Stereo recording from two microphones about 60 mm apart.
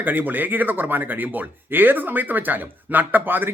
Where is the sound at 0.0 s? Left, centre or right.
Right.